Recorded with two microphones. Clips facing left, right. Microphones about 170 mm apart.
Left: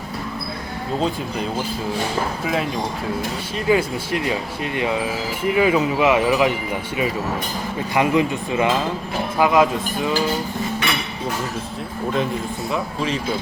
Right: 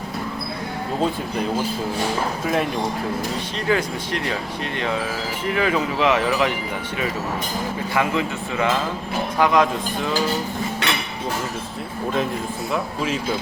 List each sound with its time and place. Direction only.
3.7 s speech: 10° left (ahead or behind)
5.5 s speech: 15° left (ahead or behind)
7.9 s speech: 15° left (ahead or behind)
12.7 s speech: 5° right (ahead or behind)